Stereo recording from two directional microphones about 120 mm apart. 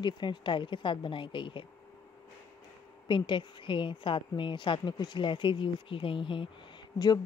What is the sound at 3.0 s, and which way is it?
A woman's voice, 40° left (ahead or behind).